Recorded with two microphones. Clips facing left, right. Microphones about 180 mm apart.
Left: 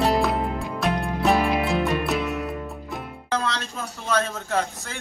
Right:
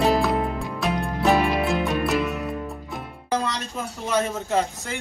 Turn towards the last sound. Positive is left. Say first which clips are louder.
# right 2 dB
turn(degrees=-20)  # may be behind; listen again after turning